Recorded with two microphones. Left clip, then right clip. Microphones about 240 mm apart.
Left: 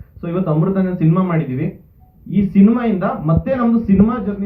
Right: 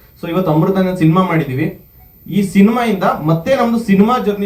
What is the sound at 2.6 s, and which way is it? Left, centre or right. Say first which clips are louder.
Speech: right 5 dB; right.